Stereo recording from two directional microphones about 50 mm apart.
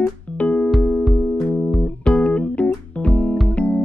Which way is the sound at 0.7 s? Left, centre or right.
Centre.